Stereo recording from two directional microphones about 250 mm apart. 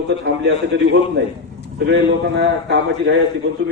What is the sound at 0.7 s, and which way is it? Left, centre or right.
Speech, right.